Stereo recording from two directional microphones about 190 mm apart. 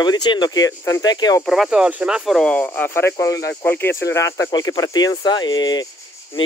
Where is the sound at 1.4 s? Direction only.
Centre (ahead or behind).